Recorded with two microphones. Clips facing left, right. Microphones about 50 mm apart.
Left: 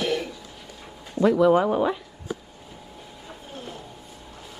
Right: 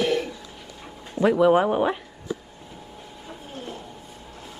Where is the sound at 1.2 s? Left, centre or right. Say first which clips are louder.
Even; centre.